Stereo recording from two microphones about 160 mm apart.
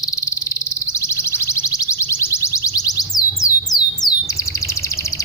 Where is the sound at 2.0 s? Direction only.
15° left (ahead or behind).